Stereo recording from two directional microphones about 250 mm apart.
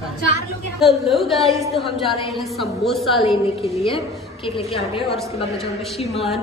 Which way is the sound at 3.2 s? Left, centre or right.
Left.